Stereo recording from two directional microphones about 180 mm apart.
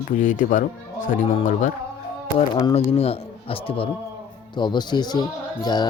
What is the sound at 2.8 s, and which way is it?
Speech, 35° left (ahead or behind).